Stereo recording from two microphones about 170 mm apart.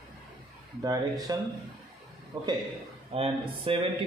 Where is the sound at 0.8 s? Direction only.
20° right (ahead or behind).